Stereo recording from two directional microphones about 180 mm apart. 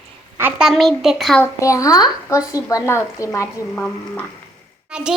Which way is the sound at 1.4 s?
15° left (ahead or behind).